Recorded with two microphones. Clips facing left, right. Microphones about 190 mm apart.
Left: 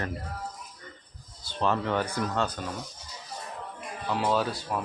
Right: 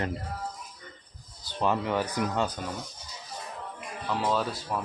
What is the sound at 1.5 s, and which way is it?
Speech, 10° right (ahead or behind).